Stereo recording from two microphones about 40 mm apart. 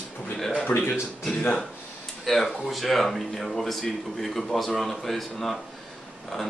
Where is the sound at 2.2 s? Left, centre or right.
Centre.